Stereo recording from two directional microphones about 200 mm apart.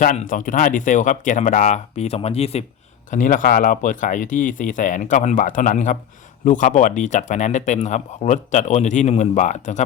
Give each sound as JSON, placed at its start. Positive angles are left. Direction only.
{"t": 0.0, "sound": "speech", "side_deg": 40}